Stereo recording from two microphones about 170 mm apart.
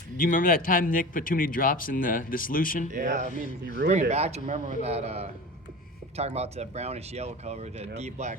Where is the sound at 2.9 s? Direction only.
50° right (ahead or behind).